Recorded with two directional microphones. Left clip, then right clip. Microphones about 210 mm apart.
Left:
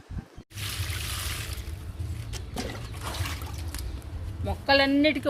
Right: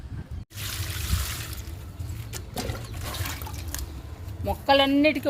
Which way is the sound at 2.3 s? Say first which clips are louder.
Right 2 dB; 25° right (ahead or behind).